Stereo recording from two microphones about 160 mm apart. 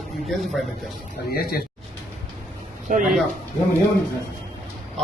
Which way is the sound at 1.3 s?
70° left (ahead or behind).